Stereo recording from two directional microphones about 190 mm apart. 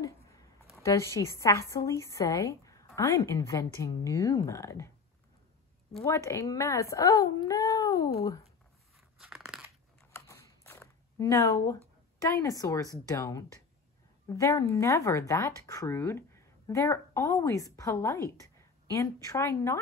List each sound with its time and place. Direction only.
0.8 s speech: 15° left (ahead or behind)
6.0 s speech: 15° left (ahead or behind)
9.2 s crunch: centre (ahead or behind)
10.1 s a sound: 15° left (ahead or behind)
12.2 s speech: 15° left (ahead or behind)